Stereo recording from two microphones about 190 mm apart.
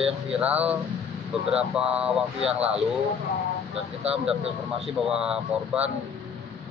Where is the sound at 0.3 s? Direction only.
5° right (ahead or behind).